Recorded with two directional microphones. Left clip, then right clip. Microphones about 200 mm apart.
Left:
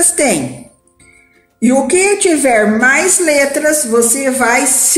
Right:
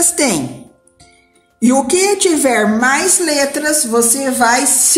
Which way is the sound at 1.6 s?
55° right (ahead or behind).